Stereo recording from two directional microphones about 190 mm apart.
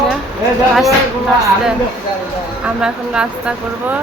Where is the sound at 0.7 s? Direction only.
Centre (ahead or behind).